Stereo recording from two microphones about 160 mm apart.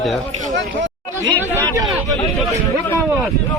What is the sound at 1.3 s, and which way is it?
Chatter, 15° left (ahead or behind).